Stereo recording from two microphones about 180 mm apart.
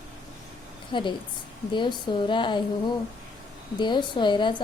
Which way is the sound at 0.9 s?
25° left (ahead or behind).